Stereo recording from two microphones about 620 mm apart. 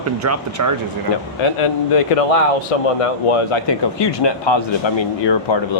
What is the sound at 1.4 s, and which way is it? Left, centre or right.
A man's voice, left.